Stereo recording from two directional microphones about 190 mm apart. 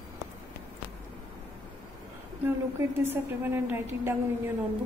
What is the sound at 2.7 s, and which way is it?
A woman's voice, 10° right (ahead or behind).